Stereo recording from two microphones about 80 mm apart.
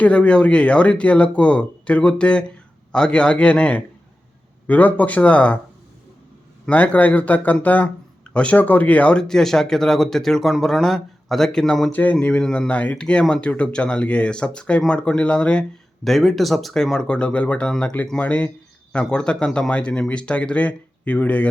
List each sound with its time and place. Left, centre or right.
0.0 s speech: centre
6.7 s speech: centre
11.9 s speech: centre
16.0 s speech: centre